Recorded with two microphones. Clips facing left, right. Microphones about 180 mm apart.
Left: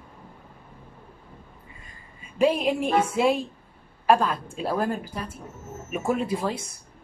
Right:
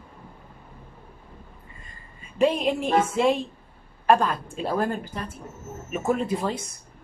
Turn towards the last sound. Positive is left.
turn(degrees=0)  # may be behind; listen again after turning